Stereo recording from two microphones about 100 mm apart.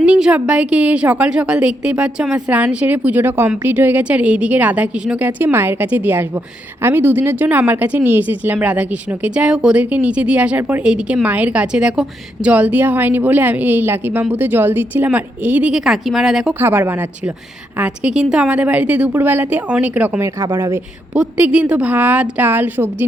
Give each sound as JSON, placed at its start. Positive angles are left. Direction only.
{"t": 0.0, "sound": "speech", "side_deg": -10}
{"t": 5.4, "sound": "a woman's voice", "side_deg": -20}
{"t": 15.7, "sound": "speech", "side_deg": -5}
{"t": 16.6, "sound": "a woman's voice", "side_deg": -20}
{"t": 20.1, "sound": "a woman's voice", "side_deg": -25}
{"t": 21.2, "sound": "speech", "side_deg": -10}